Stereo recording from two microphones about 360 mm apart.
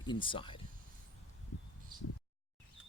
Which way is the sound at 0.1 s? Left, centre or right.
Centre.